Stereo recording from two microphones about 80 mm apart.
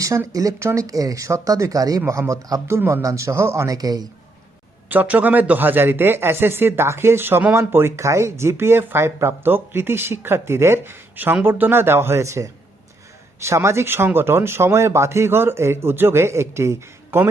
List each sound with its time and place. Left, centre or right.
0.3 s speech: right
3.0 s speech: right
3.8 s speech: right
4.9 s speech: right